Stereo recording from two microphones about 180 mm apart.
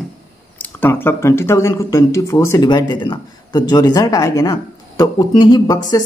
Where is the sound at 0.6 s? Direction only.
10° left (ahead or behind).